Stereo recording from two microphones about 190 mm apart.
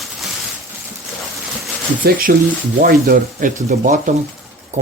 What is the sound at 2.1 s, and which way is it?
Speech, 50° right (ahead or behind).